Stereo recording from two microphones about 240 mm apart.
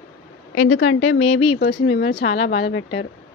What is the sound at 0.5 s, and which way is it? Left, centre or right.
Speech, left.